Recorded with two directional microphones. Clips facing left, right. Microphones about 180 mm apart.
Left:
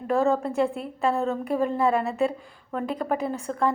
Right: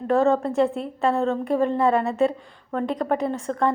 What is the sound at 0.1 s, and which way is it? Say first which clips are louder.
A woman's voice: right 3 dB; centre (ahead or behind).